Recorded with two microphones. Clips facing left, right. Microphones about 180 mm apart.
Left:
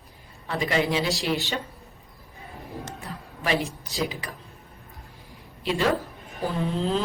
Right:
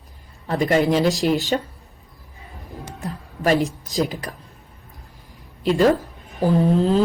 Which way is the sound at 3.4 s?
45° right (ahead or behind).